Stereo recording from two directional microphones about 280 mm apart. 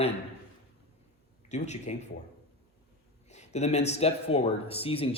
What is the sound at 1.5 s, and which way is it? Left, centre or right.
Speech, left.